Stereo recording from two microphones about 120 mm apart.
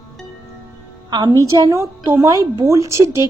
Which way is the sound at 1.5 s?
35° right (ahead or behind).